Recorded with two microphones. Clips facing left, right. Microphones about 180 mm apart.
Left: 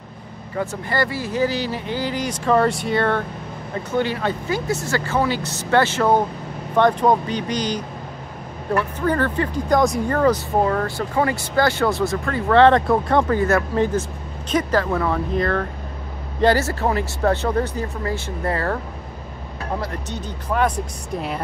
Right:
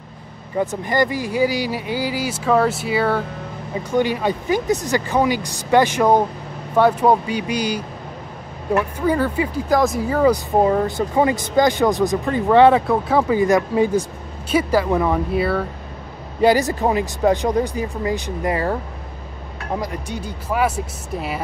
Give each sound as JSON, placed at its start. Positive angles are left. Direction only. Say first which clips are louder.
{"t": 0.6, "sound": "speech", "louder": "right 4 dB", "side_deg": -20}
{"t": 19.8, "sound": "speech", "louder": "right 2 dB", "side_deg": -10}